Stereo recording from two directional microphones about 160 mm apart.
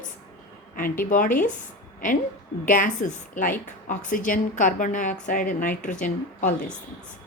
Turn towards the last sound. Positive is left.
turn(degrees=55)  # may be behind; listen again after turning